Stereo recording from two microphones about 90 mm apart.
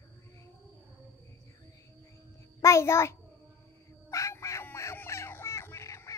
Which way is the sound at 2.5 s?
30° left (ahead or behind).